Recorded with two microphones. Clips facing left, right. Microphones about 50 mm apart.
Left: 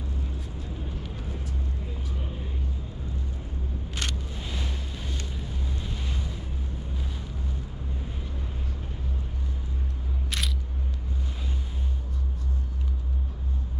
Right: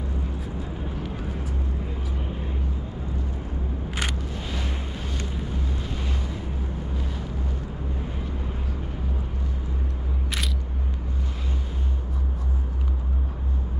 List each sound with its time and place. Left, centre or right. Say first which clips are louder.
3.9 s vehicle: right 4 dB; centre